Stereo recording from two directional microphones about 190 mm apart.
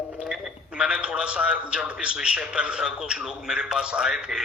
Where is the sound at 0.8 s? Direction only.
5° right (ahead or behind).